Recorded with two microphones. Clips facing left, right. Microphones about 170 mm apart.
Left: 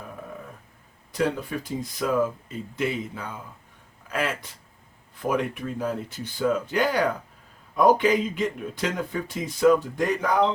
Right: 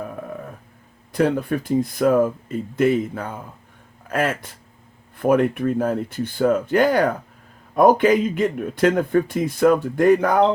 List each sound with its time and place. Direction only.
1.1 s speech: 55° right (ahead or behind)